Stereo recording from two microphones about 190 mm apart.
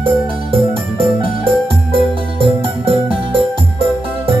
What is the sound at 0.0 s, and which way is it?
Music, 25° right (ahead or behind).